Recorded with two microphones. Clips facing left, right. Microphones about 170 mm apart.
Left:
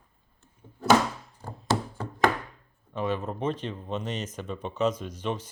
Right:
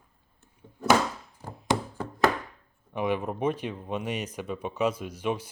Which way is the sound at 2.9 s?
15° right (ahead or behind).